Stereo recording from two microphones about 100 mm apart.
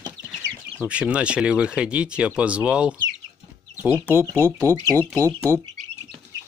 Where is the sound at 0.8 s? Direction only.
10° right (ahead or behind); by 4.5 s 25° right (ahead or behind).